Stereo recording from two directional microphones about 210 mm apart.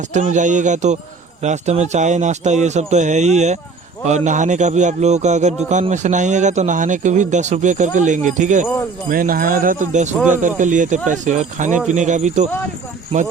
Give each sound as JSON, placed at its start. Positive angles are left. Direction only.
{"t": 0.1, "sound": "a man's voice", "side_deg": -35}